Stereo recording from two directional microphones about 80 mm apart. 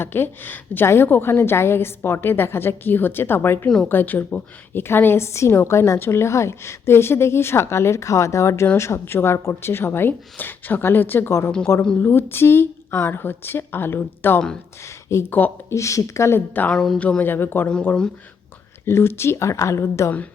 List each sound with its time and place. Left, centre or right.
0.0 s a woman's voice: left
11.7 s a woman's voice: left
15.7 s speech: left
16.7 s speech: centre
17.0 s speech: centre
17.2 s a woman's voice: left
18.9 s speech: left